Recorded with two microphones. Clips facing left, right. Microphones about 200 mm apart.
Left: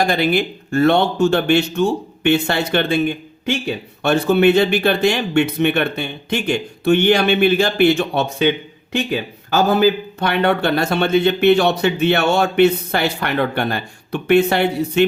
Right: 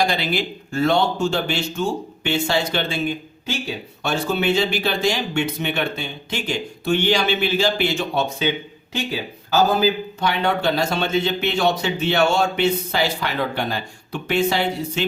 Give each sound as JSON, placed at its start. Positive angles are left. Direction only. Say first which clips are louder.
{"t": 0.0, "sound": "speech", "louder": "left 5 dB", "side_deg": 50}